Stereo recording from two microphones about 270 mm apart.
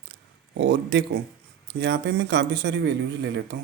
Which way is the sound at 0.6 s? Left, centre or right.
Right.